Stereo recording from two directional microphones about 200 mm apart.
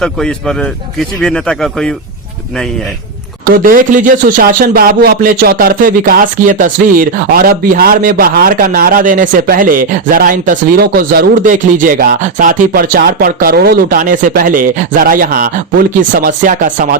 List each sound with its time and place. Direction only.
0.0 s speech: centre (ahead or behind)
3.4 s speech: 45° right (ahead or behind)